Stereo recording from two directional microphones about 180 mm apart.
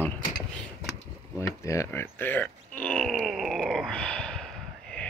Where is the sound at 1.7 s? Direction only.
15° left (ahead or behind).